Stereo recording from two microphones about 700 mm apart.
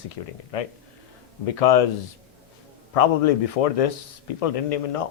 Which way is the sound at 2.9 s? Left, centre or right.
Left.